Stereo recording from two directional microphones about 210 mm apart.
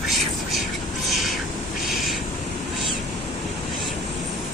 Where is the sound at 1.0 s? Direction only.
Centre (ahead or behind).